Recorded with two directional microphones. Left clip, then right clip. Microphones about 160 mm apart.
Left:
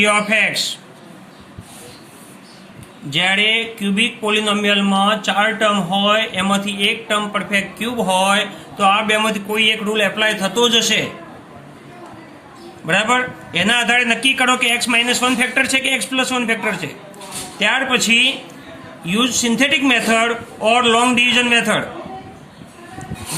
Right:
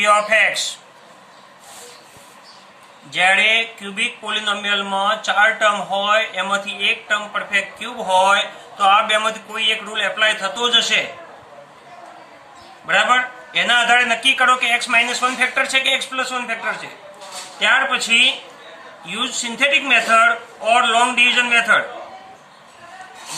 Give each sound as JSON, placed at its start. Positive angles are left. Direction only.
{"t": 3.1, "sound": "speech", "side_deg": 30}
{"t": 12.9, "sound": "speech", "side_deg": 30}